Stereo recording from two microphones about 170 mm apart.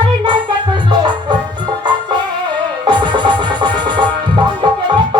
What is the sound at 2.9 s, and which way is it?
Music, 25° right (ahead or behind).